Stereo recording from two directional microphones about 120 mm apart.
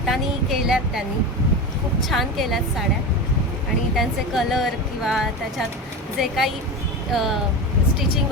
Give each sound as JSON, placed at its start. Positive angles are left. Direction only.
{"t": 0.0, "sound": "a sound", "side_deg": 0}
{"t": 2.0, "sound": "speech", "side_deg": 0}
{"t": 3.9, "sound": "speech", "side_deg": 0}